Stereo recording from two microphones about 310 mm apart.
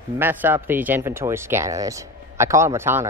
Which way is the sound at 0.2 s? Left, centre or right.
Centre.